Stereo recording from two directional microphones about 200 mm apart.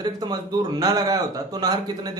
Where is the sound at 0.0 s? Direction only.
20° right (ahead or behind).